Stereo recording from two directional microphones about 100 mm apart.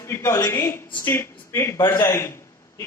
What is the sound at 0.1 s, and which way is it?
A man's voice, 30° left (ahead or behind).